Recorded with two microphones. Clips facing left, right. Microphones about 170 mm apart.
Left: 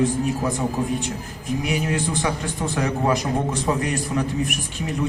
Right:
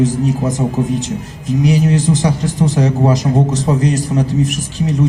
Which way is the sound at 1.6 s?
40° right (ahead or behind).